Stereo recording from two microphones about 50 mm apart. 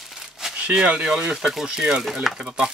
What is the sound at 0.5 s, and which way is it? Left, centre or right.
Speech, right.